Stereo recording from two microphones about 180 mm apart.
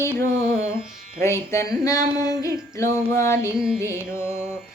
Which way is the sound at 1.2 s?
15° left (ahead or behind).